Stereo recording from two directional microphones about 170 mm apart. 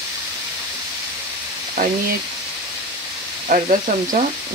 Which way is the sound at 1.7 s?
55° right (ahead or behind).